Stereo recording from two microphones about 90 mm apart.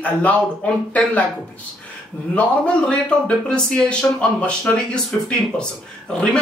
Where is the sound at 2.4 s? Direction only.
10° left (ahead or behind).